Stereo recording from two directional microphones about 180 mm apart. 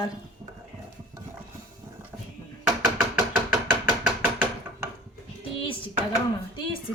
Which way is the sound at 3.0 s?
5° right (ahead or behind).